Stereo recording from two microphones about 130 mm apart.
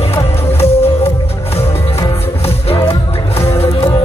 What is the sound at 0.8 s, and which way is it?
Music, 50° left (ahead or behind).